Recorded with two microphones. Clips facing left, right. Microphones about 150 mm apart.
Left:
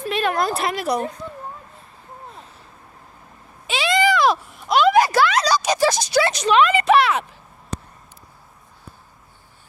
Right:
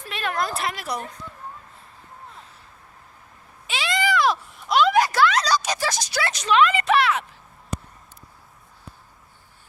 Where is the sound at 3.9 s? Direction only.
20° left (ahead or behind).